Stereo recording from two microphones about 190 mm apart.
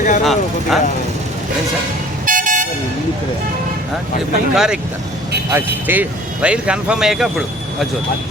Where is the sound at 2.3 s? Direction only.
45° right (ahead or behind).